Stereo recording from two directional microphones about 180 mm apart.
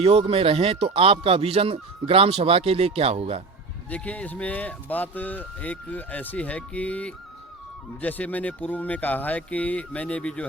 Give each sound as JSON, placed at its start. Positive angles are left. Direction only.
{"t": 0.0, "sound": "speech", "side_deg": -35}
{"t": 3.8, "sound": "speech", "side_deg": 10}